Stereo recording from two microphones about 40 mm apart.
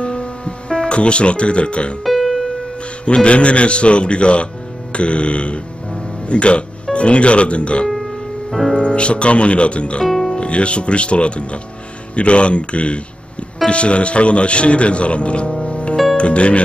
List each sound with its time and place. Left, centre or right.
0.0 s music: left
2.0 s music: centre
3.1 s speech: left
7.9 s music: centre
8.7 s speech: left
10.0 s music: centre
10.3 s speech: left
15.6 s music: left
16.2 s speech: left